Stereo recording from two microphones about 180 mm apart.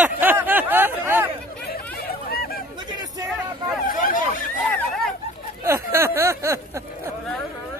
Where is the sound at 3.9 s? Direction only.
50° left (ahead or behind).